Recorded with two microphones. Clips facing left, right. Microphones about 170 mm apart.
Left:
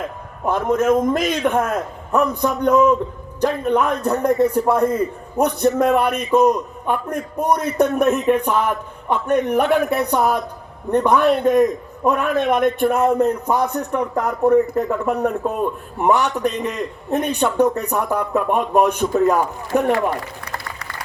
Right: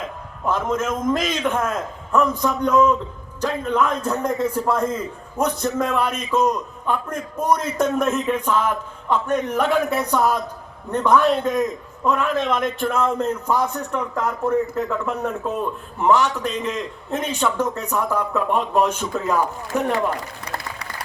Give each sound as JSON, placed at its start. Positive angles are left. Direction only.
{"t": 0.4, "sound": "a man's voice", "side_deg": 60}
{"t": 14.0, "sound": "speech", "side_deg": 35}
{"t": 14.8, "sound": "a man's voice", "side_deg": 60}